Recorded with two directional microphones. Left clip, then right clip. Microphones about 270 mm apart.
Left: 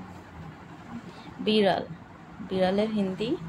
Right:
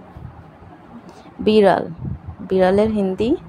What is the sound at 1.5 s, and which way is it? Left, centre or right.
A woman's voice, right.